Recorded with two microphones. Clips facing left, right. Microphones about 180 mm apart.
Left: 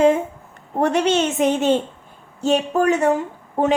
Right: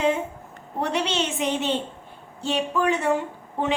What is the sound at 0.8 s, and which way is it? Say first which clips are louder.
A woman's voice: left 7 dB; 45° left (ahead or behind).